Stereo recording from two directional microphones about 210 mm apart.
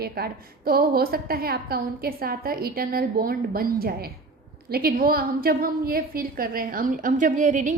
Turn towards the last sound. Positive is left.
turn(degrees=-35)  # may be behind; listen again after turning